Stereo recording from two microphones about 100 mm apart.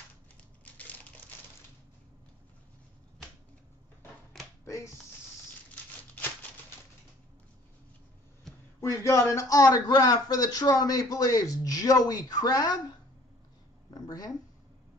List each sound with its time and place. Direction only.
0.4 s crushing: 15° left (ahead or behind)
4.3 s finger snapping: 5° left (ahead or behind)
8.8 s speech: 30° left (ahead or behind)
13.8 s a sound: 40° left (ahead or behind)